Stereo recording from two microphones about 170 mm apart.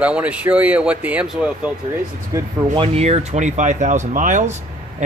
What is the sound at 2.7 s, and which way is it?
Speech, 35° right (ahead or behind).